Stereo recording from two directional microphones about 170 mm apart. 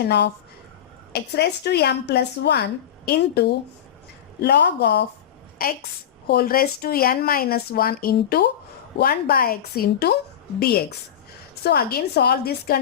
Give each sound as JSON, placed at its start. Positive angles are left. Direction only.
{"t": 0.0, "sound": "a woman's voice", "side_deg": 80}
{"t": 5.6, "sound": "speech", "side_deg": 60}